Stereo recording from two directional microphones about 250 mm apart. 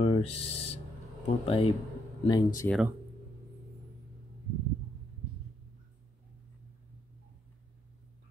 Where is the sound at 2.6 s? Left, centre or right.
Centre.